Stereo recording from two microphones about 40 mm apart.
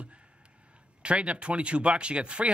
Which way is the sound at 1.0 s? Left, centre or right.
Right.